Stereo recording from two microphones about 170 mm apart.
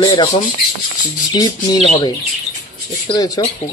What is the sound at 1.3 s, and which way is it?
Speech, 25° left (ahead or behind).